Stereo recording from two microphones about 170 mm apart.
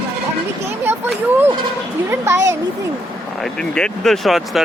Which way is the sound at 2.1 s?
15° right (ahead or behind).